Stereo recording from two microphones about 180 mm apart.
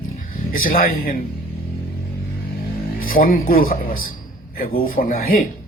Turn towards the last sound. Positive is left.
turn(degrees=55)  # may be behind; listen again after turning